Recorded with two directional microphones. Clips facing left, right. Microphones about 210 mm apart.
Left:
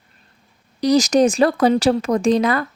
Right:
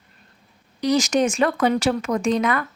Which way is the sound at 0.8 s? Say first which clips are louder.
Left 5 dB; 35° left (ahead or behind).